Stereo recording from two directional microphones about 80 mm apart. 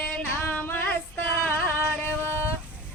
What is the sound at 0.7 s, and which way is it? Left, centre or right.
Female singing, left.